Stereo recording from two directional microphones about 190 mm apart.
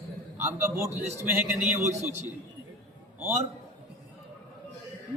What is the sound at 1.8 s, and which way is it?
Speech, 40° right (ahead or behind).